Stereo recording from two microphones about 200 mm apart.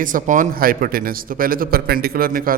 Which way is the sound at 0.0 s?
40° right (ahead or behind).